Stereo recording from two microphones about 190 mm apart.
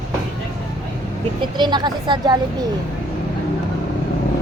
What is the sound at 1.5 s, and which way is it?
Speech, 25° right (ahead or behind).